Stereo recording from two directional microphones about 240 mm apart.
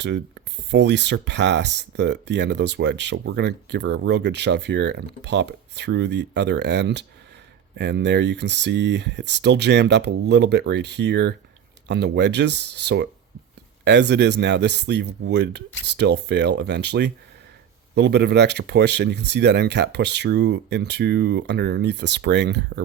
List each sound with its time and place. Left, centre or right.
0.7 s speech: right